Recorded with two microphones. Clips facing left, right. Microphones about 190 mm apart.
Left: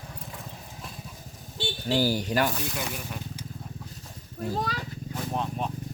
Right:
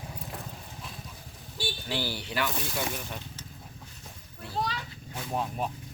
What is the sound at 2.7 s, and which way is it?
Speech, 5° left (ahead or behind).